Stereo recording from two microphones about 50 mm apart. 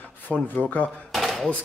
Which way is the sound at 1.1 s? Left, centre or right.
Centre.